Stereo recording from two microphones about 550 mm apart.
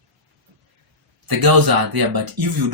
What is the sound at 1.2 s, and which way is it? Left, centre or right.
Speech, right.